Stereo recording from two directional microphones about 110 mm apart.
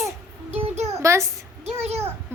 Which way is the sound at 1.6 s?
75° right (ahead or behind).